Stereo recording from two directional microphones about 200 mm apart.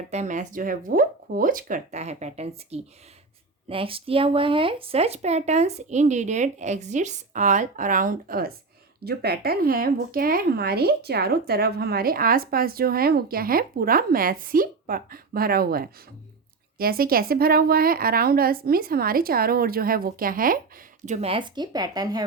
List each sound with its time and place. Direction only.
0.1 s speech: 35° right (ahead or behind)
21.0 s speech: 35° right (ahead or behind); by 22.2 s 20° right (ahead or behind)